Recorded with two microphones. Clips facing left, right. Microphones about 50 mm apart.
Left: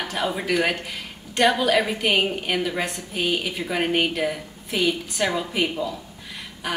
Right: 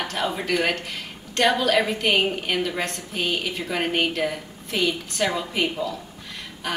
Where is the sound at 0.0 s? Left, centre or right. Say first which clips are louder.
Even; centre.